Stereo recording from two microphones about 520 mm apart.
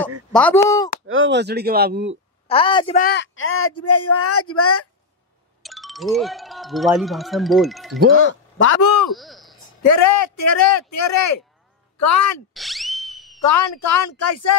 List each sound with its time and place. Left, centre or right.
0.3 s speech: centre
1.0 s speech: right
2.4 s a man's voice: centre; by 4.8 s left
5.6 s speech: centre
8.1 s a man's voice: left
9.1 s a sound: centre
9.8 s a man's voice: left
12.5 s a sound: centre
13.5 s speech: left